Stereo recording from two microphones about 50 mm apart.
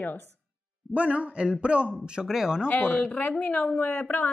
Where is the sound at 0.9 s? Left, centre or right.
Right.